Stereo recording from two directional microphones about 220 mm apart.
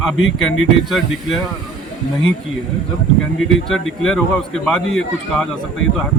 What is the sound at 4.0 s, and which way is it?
Speech, 5° left (ahead or behind).